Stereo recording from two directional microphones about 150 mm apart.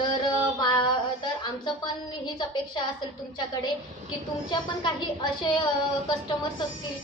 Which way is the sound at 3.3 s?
30° left (ahead or behind).